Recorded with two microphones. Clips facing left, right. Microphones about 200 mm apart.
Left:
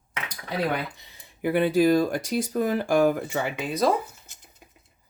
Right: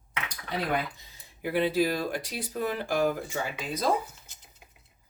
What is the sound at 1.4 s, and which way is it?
Speech, 55° left (ahead or behind).